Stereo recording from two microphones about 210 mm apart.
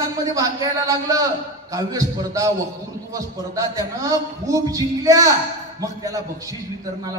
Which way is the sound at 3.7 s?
15° right (ahead or behind).